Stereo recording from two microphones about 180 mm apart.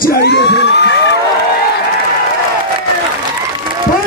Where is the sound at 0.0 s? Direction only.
60° left (ahead or behind).